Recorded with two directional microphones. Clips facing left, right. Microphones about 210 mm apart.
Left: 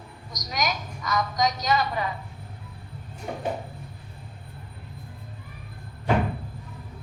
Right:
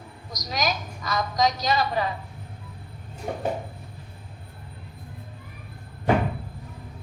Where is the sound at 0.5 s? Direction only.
30° right (ahead or behind).